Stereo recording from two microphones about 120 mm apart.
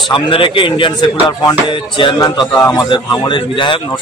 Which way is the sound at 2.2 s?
30° left (ahead or behind).